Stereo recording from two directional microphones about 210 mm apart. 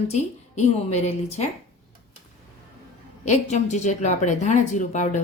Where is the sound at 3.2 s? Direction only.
35° left (ahead or behind).